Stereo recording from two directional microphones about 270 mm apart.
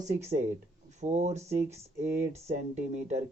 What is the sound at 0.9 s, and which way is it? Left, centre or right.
A man's voice, right.